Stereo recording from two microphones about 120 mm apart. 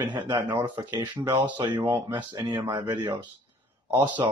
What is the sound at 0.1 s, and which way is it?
Speech, 40° right (ahead or behind).